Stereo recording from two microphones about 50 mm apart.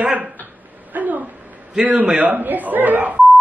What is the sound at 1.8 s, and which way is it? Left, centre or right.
Speech, right.